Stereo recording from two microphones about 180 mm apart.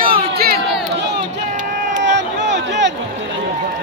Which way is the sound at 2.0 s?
80° right.